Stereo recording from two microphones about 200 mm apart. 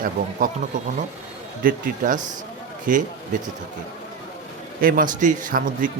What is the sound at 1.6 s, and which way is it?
Speech, 45° right (ahead or behind).